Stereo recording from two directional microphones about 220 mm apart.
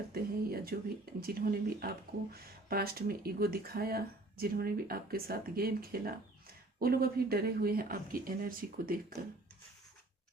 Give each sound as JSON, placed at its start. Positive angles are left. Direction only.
{"t": 0.1, "sound": "speech", "side_deg": -45}